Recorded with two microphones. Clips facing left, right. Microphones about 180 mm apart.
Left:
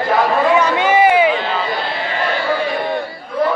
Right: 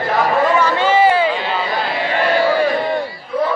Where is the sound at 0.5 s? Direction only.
15° left (ahead or behind).